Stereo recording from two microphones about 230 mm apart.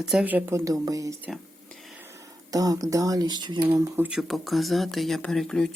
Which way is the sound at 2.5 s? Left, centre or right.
Centre.